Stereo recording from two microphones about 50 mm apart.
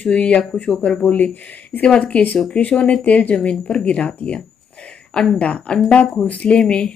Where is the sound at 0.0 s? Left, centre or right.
Left.